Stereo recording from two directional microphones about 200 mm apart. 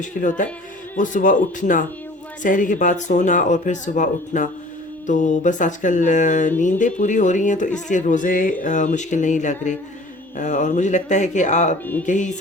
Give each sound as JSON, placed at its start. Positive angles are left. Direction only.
{"t": 0.0, "sound": "speech", "side_deg": 40}